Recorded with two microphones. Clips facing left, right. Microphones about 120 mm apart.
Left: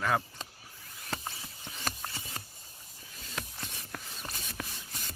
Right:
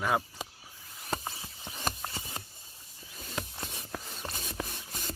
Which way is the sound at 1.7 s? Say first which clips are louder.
Right 3 dB; 20° right (ahead or behind).